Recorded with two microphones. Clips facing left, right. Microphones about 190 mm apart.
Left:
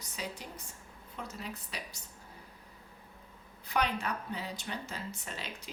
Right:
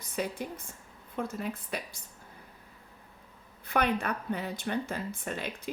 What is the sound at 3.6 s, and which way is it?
Speech, 55° right (ahead or behind).